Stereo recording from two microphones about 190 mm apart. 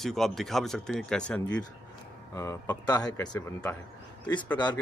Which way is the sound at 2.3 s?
15° left (ahead or behind).